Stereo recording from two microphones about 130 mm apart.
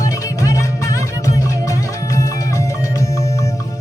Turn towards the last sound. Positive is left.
turn(degrees=25)  # may be behind; listen again after turning